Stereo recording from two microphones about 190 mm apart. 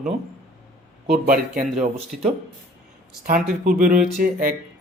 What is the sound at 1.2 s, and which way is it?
Speech, 45° right (ahead or behind).